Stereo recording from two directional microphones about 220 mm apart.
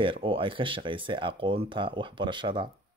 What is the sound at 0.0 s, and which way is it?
Speech, 25° right (ahead or behind).